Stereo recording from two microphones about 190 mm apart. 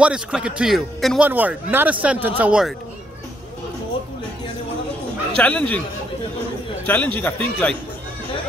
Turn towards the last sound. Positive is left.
turn(degrees=10)  # may be behind; listen again after turning